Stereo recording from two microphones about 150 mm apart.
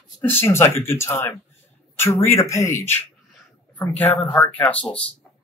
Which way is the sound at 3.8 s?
10° left (ahead or behind).